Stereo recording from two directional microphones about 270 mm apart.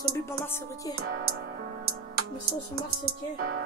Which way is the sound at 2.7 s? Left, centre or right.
Right.